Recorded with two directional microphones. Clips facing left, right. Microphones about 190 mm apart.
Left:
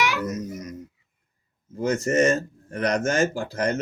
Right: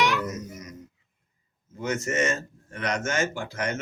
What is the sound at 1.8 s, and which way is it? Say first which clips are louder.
Speech: left 6 dB; 35° left (ahead or behind).